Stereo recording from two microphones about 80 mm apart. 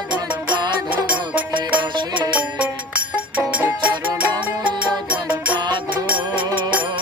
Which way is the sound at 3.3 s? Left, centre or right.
Centre.